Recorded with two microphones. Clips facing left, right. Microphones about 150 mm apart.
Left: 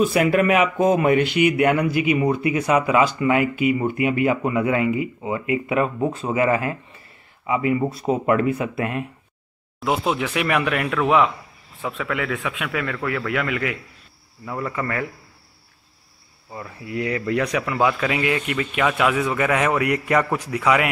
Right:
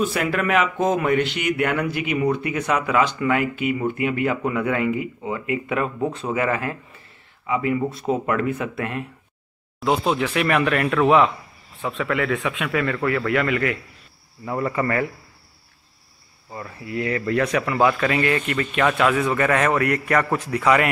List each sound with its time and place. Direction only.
0.1 s speech: 10° left (ahead or behind)
7.9 s speech: centre (ahead or behind)
14.4 s speech: 5° right (ahead or behind)
16.8 s speech: 15° left (ahead or behind)